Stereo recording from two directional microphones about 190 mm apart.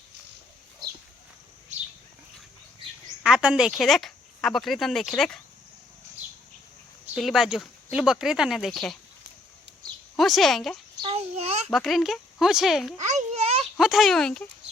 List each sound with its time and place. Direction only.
3.2 s speech: 5° right (ahead or behind)
7.1 s speech: centre (ahead or behind)
10.2 s speech: centre (ahead or behind)
11.0 s a child's voice: 35° right (ahead or behind)
11.7 s speech: centre (ahead or behind)
13.0 s a sound: 35° right (ahead or behind)
13.7 s speech: centre (ahead or behind)